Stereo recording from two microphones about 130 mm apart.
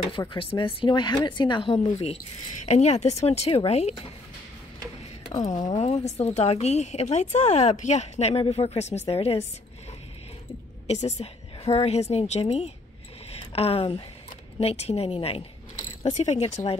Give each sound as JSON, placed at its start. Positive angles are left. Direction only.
{"t": 0.2, "sound": "speech", "side_deg": 30}
{"t": 0.6, "sound": "speech", "side_deg": 40}
{"t": 1.9, "sound": "a woman's voice", "side_deg": 55}
{"t": 5.8, "sound": "a woman's voice", "side_deg": 55}
{"t": 10.9, "sound": "a woman's voice", "side_deg": 60}
{"t": 16.2, "sound": "a woman's voice", "side_deg": 60}